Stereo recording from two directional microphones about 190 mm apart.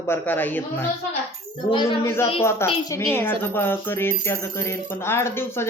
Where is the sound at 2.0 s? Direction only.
15° left (ahead or behind).